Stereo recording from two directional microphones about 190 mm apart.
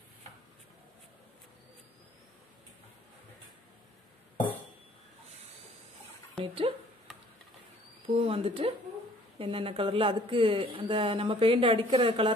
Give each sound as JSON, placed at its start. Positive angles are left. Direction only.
{"t": 6.3, "sound": "speech", "side_deg": -30}
{"t": 8.1, "sound": "speech", "side_deg": -30}